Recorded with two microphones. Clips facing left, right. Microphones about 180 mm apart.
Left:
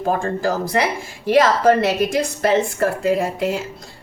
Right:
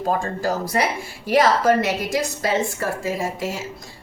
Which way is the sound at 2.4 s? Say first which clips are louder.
Left 5 dB; 60° left (ahead or behind).